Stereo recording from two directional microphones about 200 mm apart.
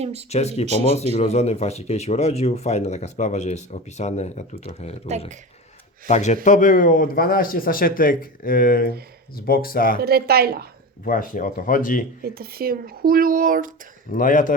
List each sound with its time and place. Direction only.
0.0 s speech: 30° right (ahead or behind)
0.3 s speech: 30° left (ahead or behind)
6.1 s a man's voice: 35° left (ahead or behind)
10.0 s speech: 50° right (ahead or behind)
11.0 s a man's voice: 45° left (ahead or behind)
12.2 s speech: 50° right (ahead or behind)
14.1 s a man's voice: 45° left (ahead or behind)